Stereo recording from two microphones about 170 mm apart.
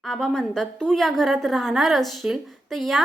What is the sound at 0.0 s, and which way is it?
A woman's voice, 5° left (ahead or behind).